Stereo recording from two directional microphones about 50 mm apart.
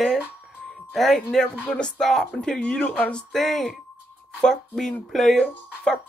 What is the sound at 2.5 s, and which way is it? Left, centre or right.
Speech, left.